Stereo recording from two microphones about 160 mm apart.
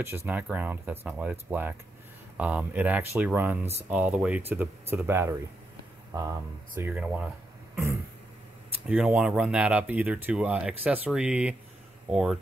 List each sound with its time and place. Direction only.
0.0 s speech: 15° right (ahead or behind)
6.9 s speech: 5° right (ahead or behind)
7.7 s throat clearing: 15° right (ahead or behind)
8.8 s speech: 5° right (ahead or behind)